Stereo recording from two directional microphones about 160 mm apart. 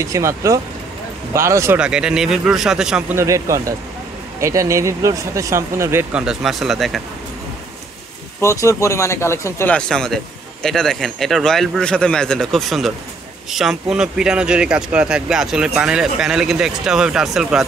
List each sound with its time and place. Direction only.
0.0 s speech: 20° right (ahead or behind)
1.8 s speech: 5° right (ahead or behind)
3.2 s speech: 20° right (ahead or behind)
6.2 s speech: centre (ahead or behind)
8.4 s speech: 20° left (ahead or behind)
9.8 s speech: 5° left (ahead or behind)